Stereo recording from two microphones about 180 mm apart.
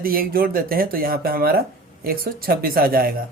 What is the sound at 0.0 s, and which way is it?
Speech, 55° right (ahead or behind).